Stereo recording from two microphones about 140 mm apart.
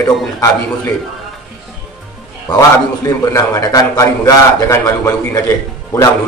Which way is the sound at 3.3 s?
25° left (ahead or behind).